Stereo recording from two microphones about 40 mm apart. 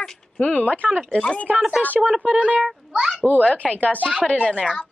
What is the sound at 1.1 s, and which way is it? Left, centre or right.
Speech, left.